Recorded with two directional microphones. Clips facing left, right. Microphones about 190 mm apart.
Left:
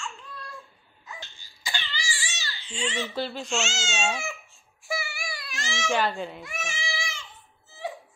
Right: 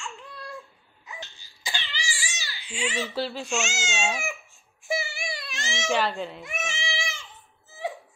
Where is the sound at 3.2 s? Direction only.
Centre (ahead or behind).